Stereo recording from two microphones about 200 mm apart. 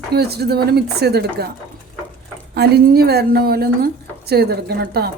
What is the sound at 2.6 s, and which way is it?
A woman's voice, 50° right (ahead or behind).